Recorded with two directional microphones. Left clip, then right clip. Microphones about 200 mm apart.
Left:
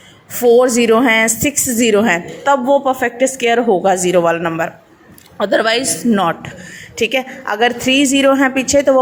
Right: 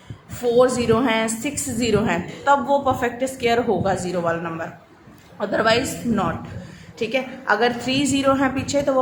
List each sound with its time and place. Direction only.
0.4 s a woman's voice: 40° left (ahead or behind)